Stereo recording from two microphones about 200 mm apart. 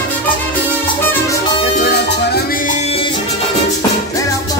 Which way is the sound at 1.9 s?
55° left (ahead or behind).